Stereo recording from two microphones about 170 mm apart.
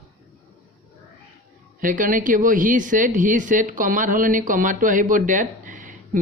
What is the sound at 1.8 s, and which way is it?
Speech, 50° right (ahead or behind).